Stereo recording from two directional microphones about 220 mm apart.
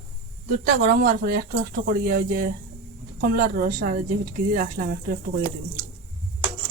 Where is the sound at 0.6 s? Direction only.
40° right (ahead or behind).